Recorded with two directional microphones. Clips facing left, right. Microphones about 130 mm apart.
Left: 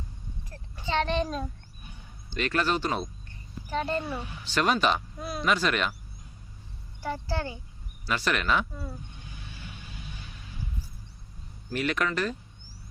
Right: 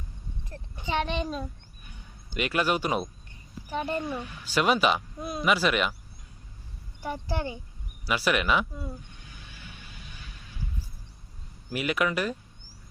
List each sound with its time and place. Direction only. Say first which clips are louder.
0.8 s a child's voice: left 2 dB; 15° right (ahead or behind)
7.0 s speech: even; 15° right (ahead or behind)
11.7 s speech: right 1 dB; 10° right (ahead or behind)